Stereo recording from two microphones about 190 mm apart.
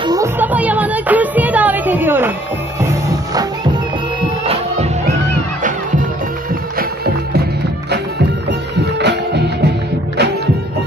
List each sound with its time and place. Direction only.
0.0 s music: 20° right (ahead or behind)
0.4 s music: 10° right (ahead or behind)
4.5 s music: 35° right (ahead or behind)
8.9 s music: 60° right (ahead or behind)